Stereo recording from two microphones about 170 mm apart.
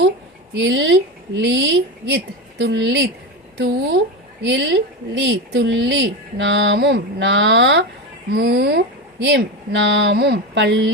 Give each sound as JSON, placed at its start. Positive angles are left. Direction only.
{"t": 0.6, "sound": "speech", "side_deg": -90}
{"t": 8.3, "sound": "speech", "side_deg": -75}